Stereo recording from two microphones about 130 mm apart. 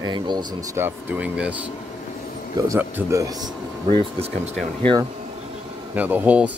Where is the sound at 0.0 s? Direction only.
35° right (ahead or behind).